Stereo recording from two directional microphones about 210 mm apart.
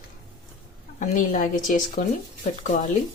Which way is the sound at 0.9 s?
40° left (ahead or behind).